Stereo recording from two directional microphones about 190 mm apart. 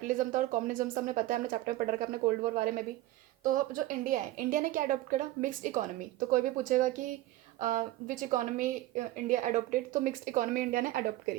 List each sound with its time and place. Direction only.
0.0 s a woman's voice: 45° right (ahead or behind)